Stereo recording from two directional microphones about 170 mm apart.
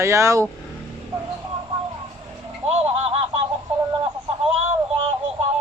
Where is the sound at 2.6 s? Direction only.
35° right (ahead or behind).